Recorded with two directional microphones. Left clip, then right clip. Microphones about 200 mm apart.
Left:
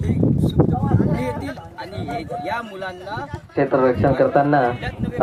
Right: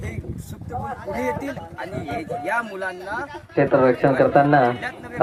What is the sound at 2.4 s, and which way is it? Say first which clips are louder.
Speech: right 2 dB; 10° left (ahead or behind).